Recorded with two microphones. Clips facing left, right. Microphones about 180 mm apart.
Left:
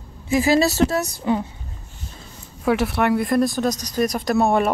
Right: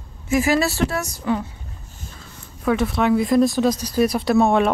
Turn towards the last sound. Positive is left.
turn(degrees=5)  # may be behind; listen again after turning